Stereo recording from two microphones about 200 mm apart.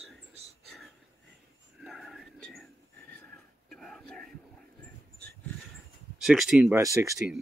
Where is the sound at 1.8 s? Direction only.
Centre (ahead or behind).